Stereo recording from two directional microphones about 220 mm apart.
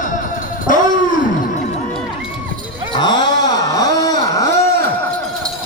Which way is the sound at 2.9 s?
20° left (ahead or behind).